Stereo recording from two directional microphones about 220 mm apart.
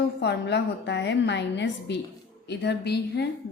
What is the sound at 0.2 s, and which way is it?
A woman's voice, 50° left (ahead or behind).